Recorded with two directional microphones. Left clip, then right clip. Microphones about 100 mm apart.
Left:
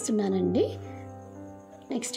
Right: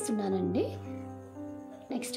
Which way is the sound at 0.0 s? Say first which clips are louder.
Left 4 dB; 35° left (ahead or behind).